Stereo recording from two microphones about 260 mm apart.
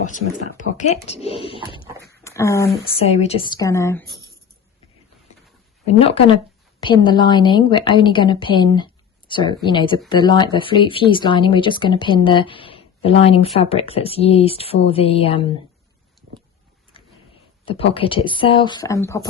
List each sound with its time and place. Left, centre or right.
0.0 s speech: left
2.0 s speech: centre
2.9 s a woman's voice: left
5.8 s a woman's voice: left
17.7 s speech: left